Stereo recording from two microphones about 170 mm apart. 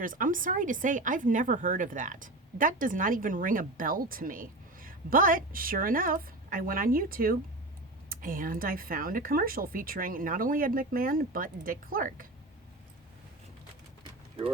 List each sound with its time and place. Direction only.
0.0 s speech: 50° right (ahead or behind)